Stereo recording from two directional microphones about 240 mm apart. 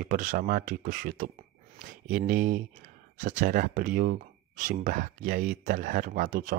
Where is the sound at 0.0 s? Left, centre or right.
Right.